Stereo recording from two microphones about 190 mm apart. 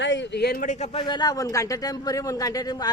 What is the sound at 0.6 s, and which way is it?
Speech, 40° left (ahead or behind).